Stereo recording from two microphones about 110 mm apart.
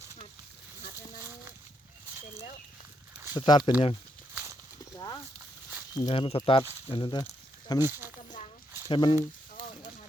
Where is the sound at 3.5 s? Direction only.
45° left (ahead or behind).